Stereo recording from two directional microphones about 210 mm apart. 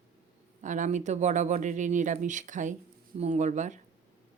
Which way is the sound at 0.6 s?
35° right (ahead or behind).